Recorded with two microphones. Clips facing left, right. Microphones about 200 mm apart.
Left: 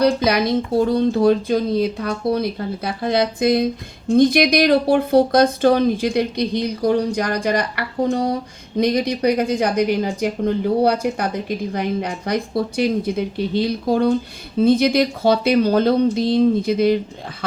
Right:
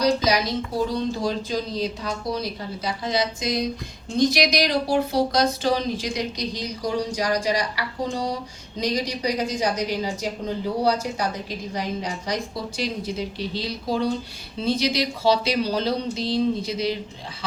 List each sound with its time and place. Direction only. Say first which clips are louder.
0.0 s a woman's voice: left 4 dB; 55° left (ahead or behind)